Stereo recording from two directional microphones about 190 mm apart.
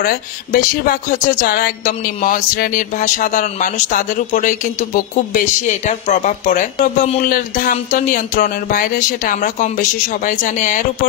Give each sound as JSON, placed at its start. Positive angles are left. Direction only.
{"t": 0.0, "sound": "speech", "side_deg": 50}